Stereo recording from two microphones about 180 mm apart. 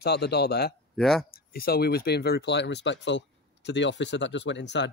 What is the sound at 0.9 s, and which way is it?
Speech, centre (ahead or behind).